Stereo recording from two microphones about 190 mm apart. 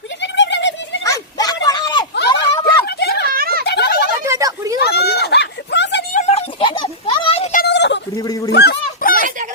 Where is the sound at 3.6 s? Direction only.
60° left (ahead or behind).